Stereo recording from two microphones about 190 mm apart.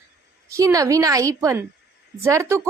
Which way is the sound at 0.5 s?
15° right (ahead or behind).